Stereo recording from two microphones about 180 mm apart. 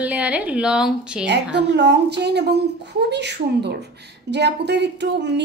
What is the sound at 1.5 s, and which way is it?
A woman's voice, 70° right (ahead or behind).